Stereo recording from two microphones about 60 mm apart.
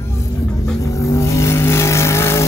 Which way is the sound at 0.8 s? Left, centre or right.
Left.